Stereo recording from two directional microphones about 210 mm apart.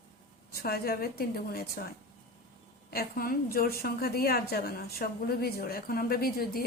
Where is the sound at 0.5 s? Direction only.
45° left (ahead or behind).